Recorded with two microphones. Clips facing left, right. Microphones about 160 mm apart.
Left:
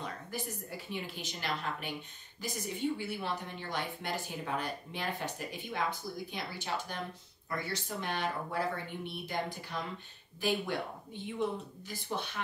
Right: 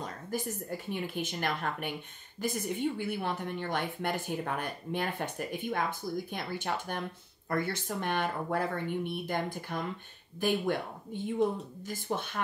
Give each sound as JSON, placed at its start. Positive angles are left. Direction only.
{"t": 0.0, "sound": "a woman's voice", "side_deg": -45}
{"t": 12.1, "sound": "a woman's voice", "side_deg": -50}